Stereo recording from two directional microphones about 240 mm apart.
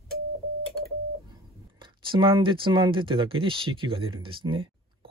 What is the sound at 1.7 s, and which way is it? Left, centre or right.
Speech, right.